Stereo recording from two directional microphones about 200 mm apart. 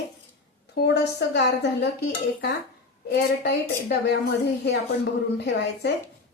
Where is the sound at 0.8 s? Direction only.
55° left (ahead or behind).